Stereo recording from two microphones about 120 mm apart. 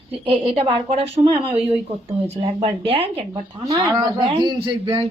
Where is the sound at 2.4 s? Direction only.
55° right (ahead or behind).